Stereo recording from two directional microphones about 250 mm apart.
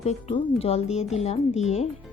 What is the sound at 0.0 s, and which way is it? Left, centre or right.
Speech, left.